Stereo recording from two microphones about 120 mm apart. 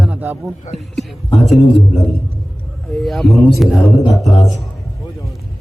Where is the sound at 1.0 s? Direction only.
Centre (ahead or behind).